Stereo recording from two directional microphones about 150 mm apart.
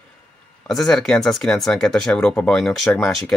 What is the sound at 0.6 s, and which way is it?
Speech, 5° left (ahead or behind).